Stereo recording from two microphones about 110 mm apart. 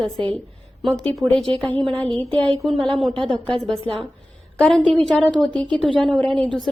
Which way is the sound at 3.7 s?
55° right (ahead or behind).